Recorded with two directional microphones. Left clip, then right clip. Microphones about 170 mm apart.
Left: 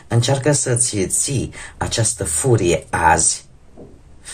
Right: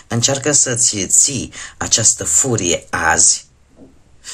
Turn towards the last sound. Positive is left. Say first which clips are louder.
# even
turn(degrees=-25)  # may be behind; listen again after turning